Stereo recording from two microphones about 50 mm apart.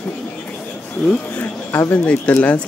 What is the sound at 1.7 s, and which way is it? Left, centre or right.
Speech, left.